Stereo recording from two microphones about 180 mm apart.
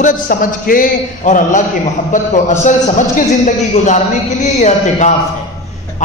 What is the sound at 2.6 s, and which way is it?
A man's voice, 40° left (ahead or behind).